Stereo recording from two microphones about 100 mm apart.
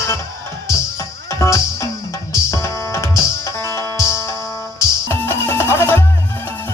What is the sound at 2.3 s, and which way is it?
Music, 30° left (ahead or behind).